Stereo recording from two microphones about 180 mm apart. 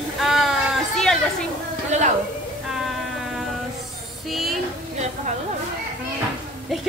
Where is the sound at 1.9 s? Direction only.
40° right (ahead or behind).